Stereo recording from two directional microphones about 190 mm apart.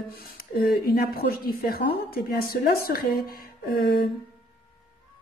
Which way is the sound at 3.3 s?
55° left (ahead or behind).